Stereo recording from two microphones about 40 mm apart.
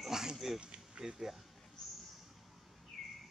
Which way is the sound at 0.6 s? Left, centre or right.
Right.